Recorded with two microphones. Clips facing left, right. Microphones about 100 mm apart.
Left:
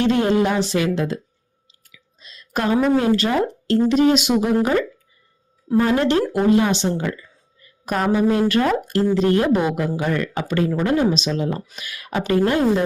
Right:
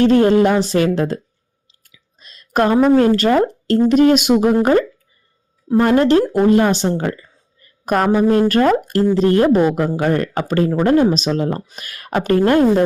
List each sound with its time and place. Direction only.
0.0 s speech: 45° right (ahead or behind)
2.1 s a sound: 50° right (ahead or behind)
2.9 s speech: 50° right (ahead or behind)
6.0 s a woman's voice: 40° right (ahead or behind)